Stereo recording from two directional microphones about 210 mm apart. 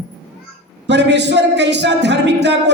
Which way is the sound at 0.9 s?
55° right (ahead or behind).